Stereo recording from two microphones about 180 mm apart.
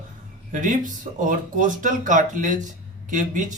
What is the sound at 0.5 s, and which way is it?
Speech, 45° right (ahead or behind).